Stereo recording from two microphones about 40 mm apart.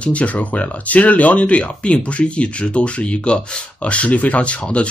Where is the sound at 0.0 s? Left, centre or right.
Left.